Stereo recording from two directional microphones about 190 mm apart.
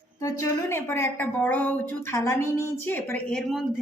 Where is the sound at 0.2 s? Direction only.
15° left (ahead or behind).